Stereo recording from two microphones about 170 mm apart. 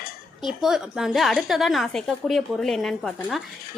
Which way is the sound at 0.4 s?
Centre (ahead or behind).